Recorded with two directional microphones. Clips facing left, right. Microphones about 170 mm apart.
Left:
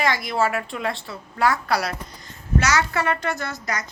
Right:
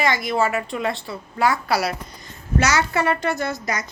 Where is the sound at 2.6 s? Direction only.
25° right (ahead or behind).